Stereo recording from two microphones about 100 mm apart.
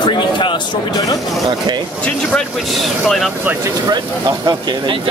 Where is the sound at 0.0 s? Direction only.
50° left (ahead or behind).